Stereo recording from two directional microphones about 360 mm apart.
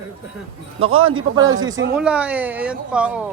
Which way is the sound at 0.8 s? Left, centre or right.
Right.